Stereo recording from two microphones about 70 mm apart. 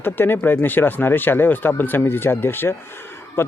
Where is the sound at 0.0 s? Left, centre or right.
Left.